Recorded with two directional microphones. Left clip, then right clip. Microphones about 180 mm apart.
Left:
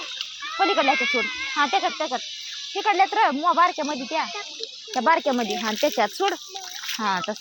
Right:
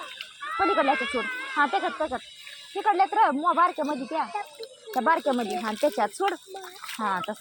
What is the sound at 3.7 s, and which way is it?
Speech, 50° left (ahead or behind).